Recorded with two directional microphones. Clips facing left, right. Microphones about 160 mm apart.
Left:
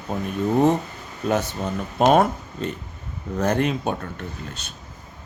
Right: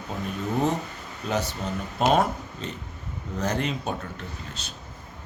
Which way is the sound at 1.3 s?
55° left (ahead or behind).